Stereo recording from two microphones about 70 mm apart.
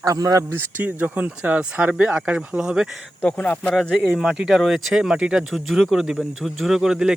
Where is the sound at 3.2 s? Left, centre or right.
Left.